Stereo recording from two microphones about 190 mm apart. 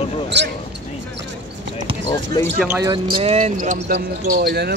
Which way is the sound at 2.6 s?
15° right (ahead or behind).